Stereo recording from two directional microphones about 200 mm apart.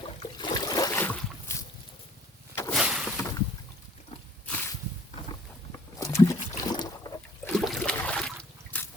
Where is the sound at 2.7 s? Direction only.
Centre (ahead or behind).